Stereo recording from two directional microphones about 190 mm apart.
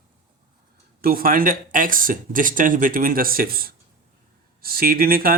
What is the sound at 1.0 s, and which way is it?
Speech, 50° right (ahead or behind).